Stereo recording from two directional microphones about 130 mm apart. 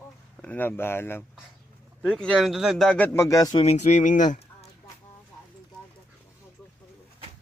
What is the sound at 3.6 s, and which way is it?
Speech, 60° left (ahead or behind).